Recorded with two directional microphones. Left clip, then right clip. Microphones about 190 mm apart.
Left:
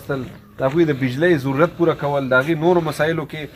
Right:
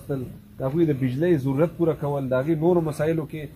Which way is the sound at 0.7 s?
10° right (ahead or behind).